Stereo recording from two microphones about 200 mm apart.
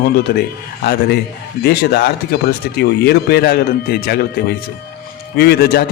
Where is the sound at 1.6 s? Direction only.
55° left (ahead or behind).